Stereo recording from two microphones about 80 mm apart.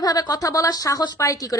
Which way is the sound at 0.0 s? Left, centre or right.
Left.